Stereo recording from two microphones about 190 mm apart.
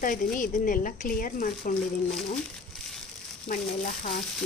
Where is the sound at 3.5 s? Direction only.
45° left (ahead or behind).